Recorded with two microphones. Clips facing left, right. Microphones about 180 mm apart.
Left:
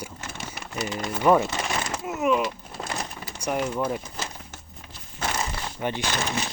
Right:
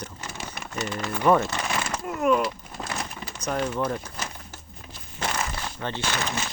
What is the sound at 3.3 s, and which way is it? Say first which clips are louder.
Speech: left 1 dB; 10° left (ahead or behind).